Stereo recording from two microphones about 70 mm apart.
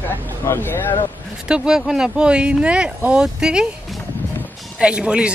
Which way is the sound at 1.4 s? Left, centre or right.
Centre.